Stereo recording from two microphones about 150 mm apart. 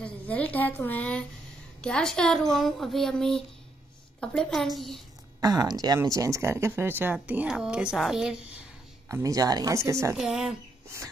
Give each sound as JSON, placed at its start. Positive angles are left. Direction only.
{"t": 0.0, "sound": "a woman's voice", "side_deg": 10}
{"t": 5.4, "sound": "speech", "side_deg": -25}
{"t": 9.1, "sound": "speech", "side_deg": -20}
{"t": 10.1, "sound": "speech", "side_deg": -5}